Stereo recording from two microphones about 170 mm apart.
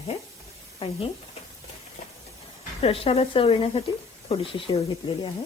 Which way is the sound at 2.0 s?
50° left (ahead or behind).